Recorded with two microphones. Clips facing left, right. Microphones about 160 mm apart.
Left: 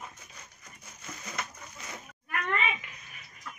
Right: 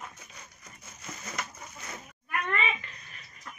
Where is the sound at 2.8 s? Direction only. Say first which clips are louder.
Right 1 dB; 10° left (ahead or behind).